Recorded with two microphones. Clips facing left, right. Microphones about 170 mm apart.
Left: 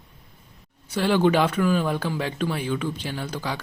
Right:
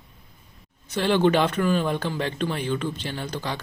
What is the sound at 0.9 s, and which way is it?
Speech, 10° left (ahead or behind).